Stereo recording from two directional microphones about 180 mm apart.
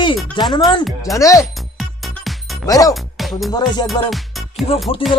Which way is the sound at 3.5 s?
25° left (ahead or behind).